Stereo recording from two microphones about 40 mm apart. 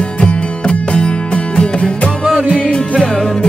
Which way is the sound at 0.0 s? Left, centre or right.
Left.